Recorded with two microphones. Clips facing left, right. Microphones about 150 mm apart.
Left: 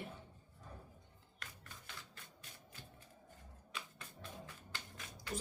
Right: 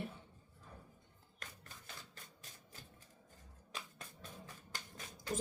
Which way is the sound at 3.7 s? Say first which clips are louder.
Even; 35° right (ahead or behind).